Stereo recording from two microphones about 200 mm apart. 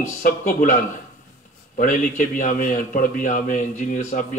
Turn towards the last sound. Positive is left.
turn(degrees=40)  # may be behind; listen again after turning